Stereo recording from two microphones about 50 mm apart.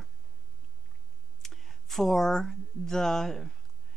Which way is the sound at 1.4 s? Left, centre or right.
Centre.